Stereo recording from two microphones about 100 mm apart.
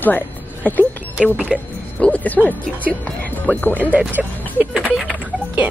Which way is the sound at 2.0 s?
15° left (ahead or behind).